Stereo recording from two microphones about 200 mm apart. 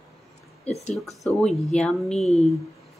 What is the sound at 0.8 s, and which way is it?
Speech, centre (ahead or behind).